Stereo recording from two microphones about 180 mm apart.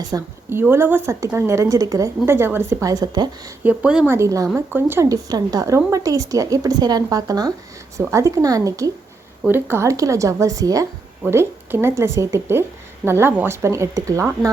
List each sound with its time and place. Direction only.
0.0 s speech: 20° right (ahead or behind)
3.6 s speech: 5° right (ahead or behind)